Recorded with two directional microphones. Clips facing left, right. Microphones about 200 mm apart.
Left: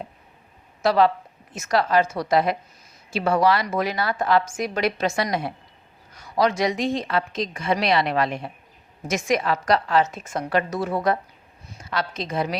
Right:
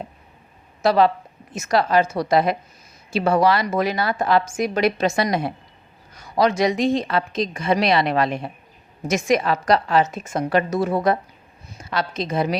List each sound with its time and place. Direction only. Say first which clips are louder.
0.8 s a woman's voice: right 2 dB; 20° right (ahead or behind)